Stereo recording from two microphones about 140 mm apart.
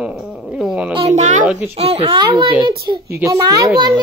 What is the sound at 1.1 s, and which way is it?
Speech, 55° right (ahead or behind).